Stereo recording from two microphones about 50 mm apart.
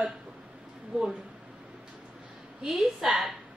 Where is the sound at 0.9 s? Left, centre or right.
Right.